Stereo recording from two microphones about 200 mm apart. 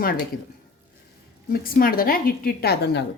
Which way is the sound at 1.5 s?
45° left (ahead or behind).